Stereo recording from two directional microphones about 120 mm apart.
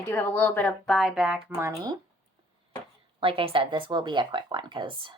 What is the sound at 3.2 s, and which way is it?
Speech, 50° right (ahead or behind).